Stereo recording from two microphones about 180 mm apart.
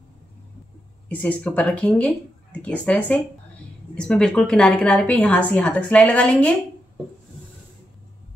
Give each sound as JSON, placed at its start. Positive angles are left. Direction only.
{"t": 1.0, "sound": "a woman's voice", "side_deg": 10}